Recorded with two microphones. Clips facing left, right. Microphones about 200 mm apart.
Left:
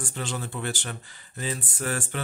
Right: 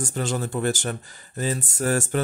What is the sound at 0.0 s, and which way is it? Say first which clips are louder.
Speech: right 6 dB; 45° right (ahead or behind).